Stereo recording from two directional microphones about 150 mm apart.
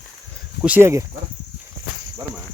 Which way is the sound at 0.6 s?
15° right (ahead or behind).